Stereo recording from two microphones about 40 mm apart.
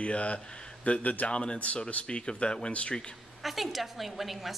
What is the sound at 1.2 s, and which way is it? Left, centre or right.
Speech, left.